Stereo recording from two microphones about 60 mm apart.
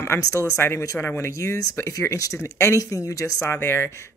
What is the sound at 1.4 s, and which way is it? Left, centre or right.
Speech, left.